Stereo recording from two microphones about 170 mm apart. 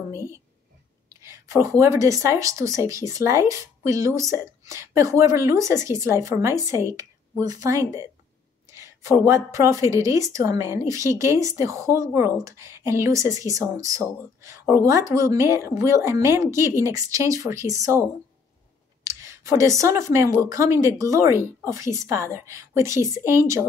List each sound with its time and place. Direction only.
1.0 s speech: 15° right (ahead or behind)
19.0 s speech: 15° right (ahead or behind)